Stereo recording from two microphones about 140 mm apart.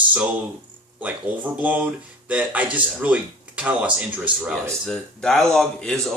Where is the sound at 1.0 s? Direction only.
10° right (ahead or behind).